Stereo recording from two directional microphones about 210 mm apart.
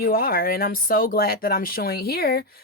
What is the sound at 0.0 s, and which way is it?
Speech, 45° left (ahead or behind).